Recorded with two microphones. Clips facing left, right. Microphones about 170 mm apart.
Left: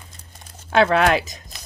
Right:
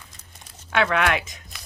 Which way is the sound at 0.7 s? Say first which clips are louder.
Left 5 dB; 35° left (ahead or behind).